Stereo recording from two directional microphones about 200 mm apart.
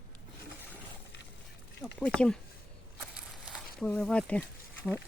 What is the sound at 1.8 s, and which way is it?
Speech, 5° left (ahead or behind).